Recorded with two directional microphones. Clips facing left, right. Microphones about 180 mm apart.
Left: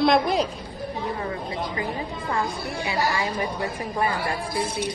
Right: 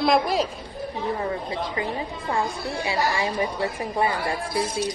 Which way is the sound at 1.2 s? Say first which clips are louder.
Right 2 dB; 30° right (ahead or behind).